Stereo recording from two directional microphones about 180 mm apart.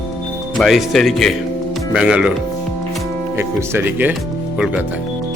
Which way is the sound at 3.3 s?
15° right (ahead or behind).